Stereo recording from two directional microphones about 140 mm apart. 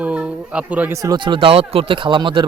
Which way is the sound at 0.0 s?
10° right (ahead or behind).